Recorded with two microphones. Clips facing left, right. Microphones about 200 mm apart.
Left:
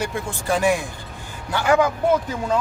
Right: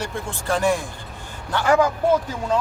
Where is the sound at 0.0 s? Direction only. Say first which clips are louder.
Left 2 dB; 15° left (ahead or behind).